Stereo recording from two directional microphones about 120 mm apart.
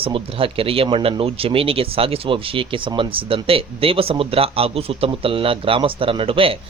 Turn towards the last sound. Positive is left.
turn(degrees=-50)  # may be behind; listen again after turning